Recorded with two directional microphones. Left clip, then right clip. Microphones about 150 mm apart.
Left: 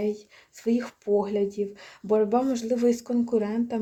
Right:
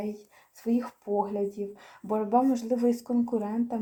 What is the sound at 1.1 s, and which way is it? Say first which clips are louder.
Speech: left 4 dB; 75° left (ahead or behind).